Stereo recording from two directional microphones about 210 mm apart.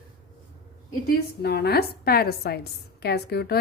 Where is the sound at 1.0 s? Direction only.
50° left (ahead or behind).